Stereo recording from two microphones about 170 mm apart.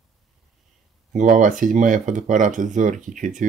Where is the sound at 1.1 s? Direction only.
50° right (ahead or behind).